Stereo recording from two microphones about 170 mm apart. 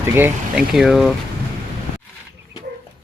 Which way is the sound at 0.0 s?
10° right (ahead or behind).